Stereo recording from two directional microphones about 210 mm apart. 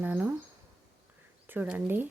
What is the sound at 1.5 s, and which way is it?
Speech, 10° right (ahead or behind).